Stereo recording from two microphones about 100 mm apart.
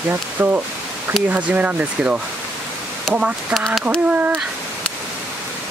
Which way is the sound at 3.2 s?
10° right (ahead or behind).